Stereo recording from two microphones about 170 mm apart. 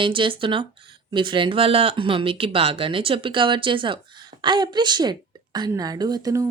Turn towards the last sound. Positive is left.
turn(degrees=-20)  # may be behind; listen again after turning